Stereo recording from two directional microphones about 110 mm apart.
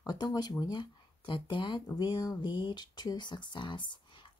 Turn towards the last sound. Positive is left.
turn(degrees=45)  # may be behind; listen again after turning